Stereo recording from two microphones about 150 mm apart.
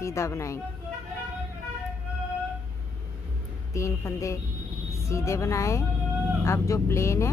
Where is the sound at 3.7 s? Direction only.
20° left (ahead or behind).